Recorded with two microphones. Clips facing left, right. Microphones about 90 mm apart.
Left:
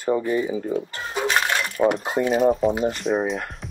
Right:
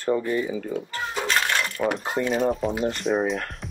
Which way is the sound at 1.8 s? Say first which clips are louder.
Left 7 dB; 30° left (ahead or behind).